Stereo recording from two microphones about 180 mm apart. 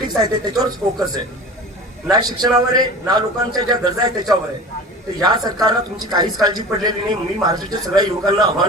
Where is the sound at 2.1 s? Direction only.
20° right (ahead or behind).